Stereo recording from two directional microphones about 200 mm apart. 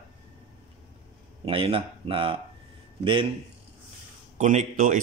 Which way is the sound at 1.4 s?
25° right (ahead or behind).